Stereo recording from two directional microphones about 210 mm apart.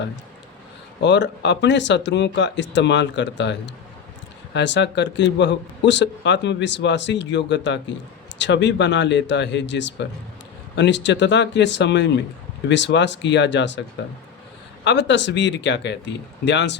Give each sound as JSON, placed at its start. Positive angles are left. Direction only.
{"t": 1.0, "sound": "a man's voice", "side_deg": 55}
{"t": 4.5, "sound": "a man's voice", "side_deg": 55}
{"t": 14.8, "sound": "a man's voice", "side_deg": 55}